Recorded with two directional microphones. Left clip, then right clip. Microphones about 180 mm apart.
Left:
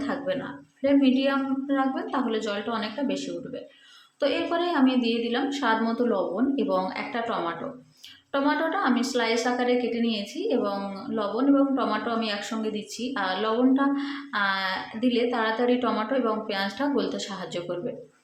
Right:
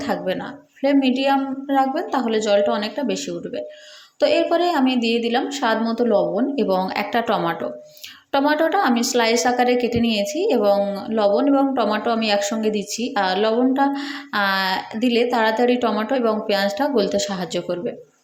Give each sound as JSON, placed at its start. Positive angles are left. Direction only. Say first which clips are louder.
{"t": 0.0, "sound": "a woman's voice", "louder": "right 5 dB", "side_deg": -30}